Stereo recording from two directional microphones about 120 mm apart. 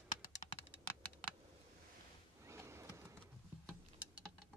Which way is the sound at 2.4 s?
25° right (ahead or behind).